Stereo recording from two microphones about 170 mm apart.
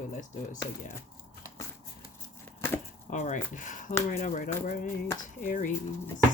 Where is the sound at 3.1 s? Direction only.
50° left (ahead or behind).